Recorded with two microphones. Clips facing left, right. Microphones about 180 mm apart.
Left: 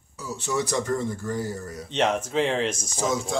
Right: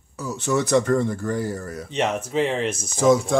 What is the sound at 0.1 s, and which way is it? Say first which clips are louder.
Speech: right 5 dB; 60° right (ahead or behind).